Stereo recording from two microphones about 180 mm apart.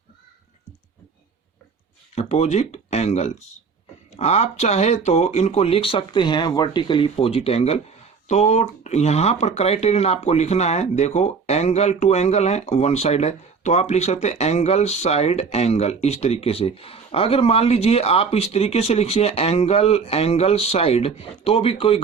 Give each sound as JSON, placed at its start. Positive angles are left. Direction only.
{"t": 2.1, "sound": "speech", "side_deg": 35}